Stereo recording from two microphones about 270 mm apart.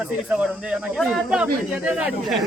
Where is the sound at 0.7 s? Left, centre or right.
Centre.